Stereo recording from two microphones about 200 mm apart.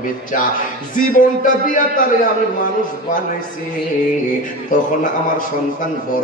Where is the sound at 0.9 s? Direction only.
40° left (ahead or behind).